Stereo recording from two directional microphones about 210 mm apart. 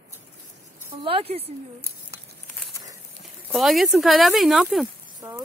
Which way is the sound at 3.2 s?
Centre (ahead or behind).